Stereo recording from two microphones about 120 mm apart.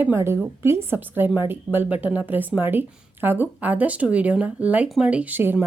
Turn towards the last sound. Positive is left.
turn(degrees=-15)  # may be behind; listen again after turning